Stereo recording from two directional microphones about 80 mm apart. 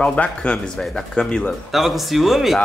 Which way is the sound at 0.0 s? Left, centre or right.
Centre.